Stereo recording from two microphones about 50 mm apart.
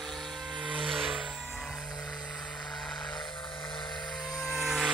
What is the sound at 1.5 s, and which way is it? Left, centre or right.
Music, centre.